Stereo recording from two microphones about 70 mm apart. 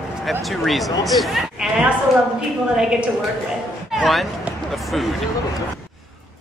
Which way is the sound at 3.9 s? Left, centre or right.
Centre.